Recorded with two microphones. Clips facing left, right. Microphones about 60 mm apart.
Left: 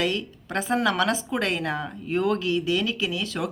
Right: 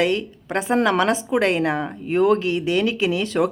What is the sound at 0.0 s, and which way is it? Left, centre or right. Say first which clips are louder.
A woman's voice: right 6 dB; right.